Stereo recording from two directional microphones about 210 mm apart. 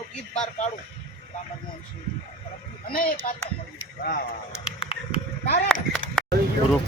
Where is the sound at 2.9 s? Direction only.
45° left (ahead or behind).